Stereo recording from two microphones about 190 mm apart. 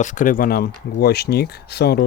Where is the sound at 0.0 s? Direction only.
40° left (ahead or behind).